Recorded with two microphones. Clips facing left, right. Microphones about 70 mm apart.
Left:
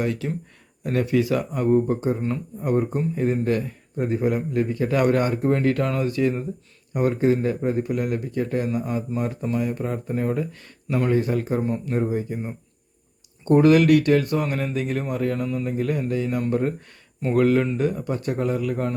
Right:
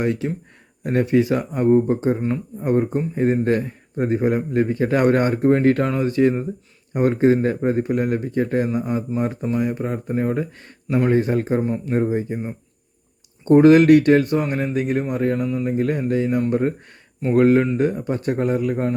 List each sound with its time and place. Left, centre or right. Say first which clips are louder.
0.0 s speech: right 3 dB; right
8.7 s speech: right 3 dB; centre
11.1 s speech: right 2 dB; right
13.4 s speech: right 4 dB; right
15.4 s speech: right 3 dB; centre
15.6 s speech: right 4 dB; right